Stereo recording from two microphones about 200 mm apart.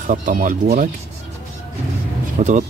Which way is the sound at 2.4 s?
35° right (ahead or behind).